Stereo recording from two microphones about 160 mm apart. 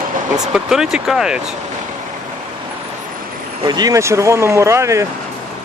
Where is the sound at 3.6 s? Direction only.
25° right (ahead or behind).